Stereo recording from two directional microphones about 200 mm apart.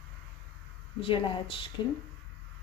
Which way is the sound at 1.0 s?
25° left (ahead or behind).